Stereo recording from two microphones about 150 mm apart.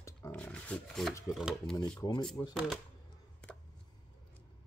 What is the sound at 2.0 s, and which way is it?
Speech, 30° left (ahead or behind).